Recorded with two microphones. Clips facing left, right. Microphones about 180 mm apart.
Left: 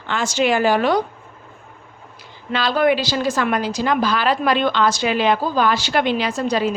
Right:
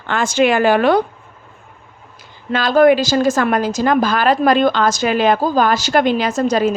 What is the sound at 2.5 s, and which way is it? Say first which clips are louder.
A woman's voice: right 6 dB; 45° right (ahead or behind).